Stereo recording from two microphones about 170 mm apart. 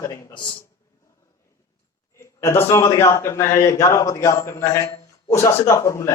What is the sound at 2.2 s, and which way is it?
A man's voice, 15° left (ahead or behind).